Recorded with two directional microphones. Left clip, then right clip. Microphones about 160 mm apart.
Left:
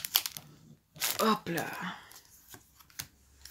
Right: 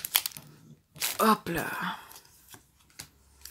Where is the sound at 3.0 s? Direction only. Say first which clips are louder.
Left 3 dB; 35° left (ahead or behind).